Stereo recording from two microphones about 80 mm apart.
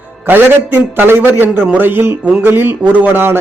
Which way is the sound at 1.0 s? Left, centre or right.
Right.